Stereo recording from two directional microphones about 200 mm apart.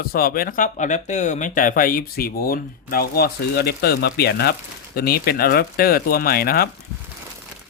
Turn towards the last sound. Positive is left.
turn(degrees=50)  # may be behind; listen again after turning